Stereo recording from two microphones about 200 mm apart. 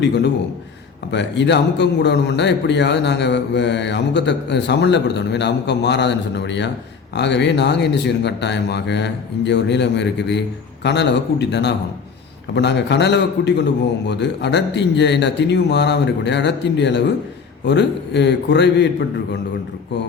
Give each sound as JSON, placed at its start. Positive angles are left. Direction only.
{"t": 0.0, "sound": "a man's voice", "side_deg": 60}